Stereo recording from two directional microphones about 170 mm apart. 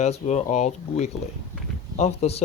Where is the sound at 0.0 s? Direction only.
40° left (ahead or behind).